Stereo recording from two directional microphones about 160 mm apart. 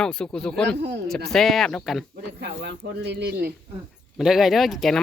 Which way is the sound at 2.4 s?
90° right.